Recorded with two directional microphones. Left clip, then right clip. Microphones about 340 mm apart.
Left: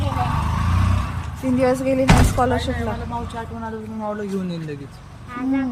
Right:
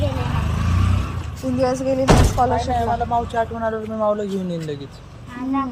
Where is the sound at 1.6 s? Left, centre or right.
Centre.